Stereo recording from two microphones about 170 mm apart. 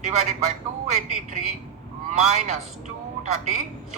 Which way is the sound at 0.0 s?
40° right (ahead or behind).